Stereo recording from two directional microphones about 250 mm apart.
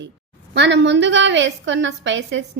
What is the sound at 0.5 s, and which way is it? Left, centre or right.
A woman's voice, right.